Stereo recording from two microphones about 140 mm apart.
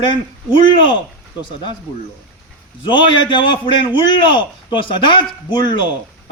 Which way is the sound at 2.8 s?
35° left (ahead or behind).